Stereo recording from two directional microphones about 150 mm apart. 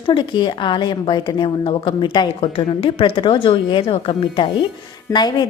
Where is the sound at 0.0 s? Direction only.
35° left (ahead or behind).